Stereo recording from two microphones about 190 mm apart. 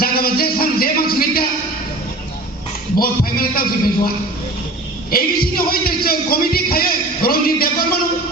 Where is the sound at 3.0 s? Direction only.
50° left (ahead or behind).